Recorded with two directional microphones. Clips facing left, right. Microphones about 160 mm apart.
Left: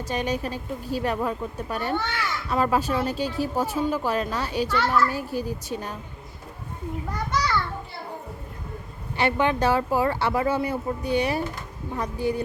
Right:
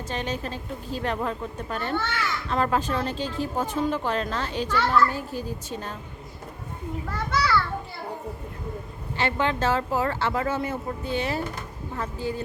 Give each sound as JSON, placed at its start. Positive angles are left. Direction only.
{"t": 0.1, "sound": "a woman's voice", "side_deg": 10}
{"t": 7.1, "sound": "children playing", "side_deg": 20}
{"t": 9.1, "sound": "a woman's voice", "side_deg": 15}